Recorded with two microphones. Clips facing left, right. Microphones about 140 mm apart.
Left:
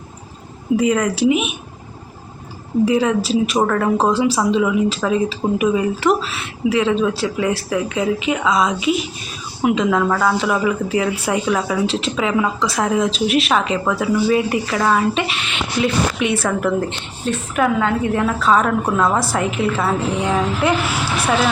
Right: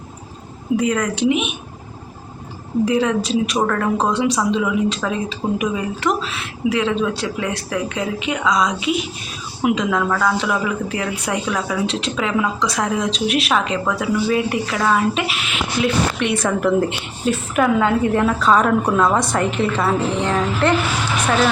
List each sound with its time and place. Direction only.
0.8 s speech: 5° left (ahead or behind)
2.8 s speech: 5° left (ahead or behind)